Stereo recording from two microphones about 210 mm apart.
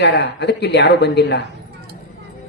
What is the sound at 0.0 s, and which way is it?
A man's voice, 50° left (ahead or behind).